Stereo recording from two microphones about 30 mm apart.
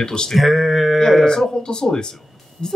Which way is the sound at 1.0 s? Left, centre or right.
Centre.